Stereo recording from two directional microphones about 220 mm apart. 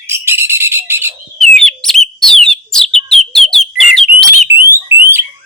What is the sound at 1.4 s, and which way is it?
Bird, centre (ahead or behind).